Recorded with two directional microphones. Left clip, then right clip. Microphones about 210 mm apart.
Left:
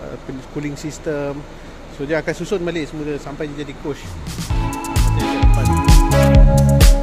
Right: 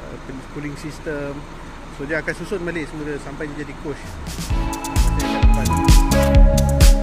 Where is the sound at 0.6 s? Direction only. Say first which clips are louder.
Left 4 dB; 20° left (ahead or behind).